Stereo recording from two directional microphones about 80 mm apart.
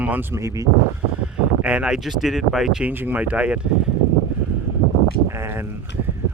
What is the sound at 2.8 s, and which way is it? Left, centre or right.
Speech, right.